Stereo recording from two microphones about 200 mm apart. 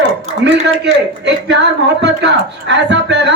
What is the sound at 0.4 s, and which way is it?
Speech, 65° right (ahead or behind).